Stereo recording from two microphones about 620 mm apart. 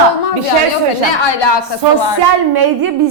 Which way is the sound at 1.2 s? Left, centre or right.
Left.